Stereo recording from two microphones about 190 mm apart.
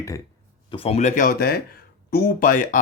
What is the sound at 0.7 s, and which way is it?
Speech, 30° left (ahead or behind).